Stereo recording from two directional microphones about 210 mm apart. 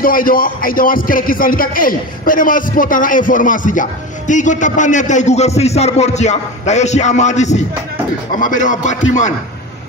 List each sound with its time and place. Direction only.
0.0 s speech: 40° left (ahead or behind)